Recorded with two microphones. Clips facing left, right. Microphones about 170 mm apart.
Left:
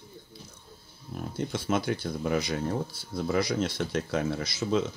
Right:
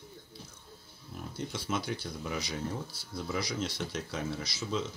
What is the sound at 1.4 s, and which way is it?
Speech, 55° left (ahead or behind).